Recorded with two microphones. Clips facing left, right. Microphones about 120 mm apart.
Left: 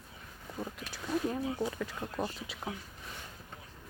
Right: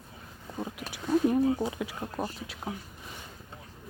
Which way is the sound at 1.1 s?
15° right (ahead or behind).